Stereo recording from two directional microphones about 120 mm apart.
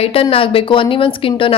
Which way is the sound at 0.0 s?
50° left (ahead or behind).